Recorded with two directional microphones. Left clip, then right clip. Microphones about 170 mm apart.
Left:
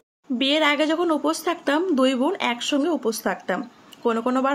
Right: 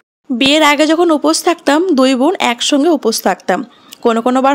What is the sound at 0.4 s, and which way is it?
A woman's voice, 65° right (ahead or behind).